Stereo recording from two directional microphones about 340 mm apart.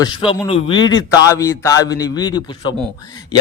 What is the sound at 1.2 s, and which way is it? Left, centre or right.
A man's voice, centre.